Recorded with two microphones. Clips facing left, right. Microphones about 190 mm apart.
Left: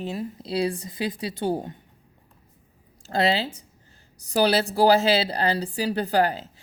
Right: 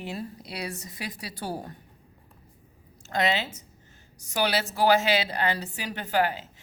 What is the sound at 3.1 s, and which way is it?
A woman's voice, 30° left (ahead or behind).